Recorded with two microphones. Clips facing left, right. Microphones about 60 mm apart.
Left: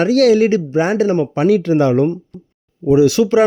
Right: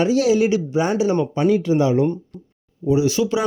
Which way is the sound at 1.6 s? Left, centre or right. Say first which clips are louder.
Left 4 dB; left.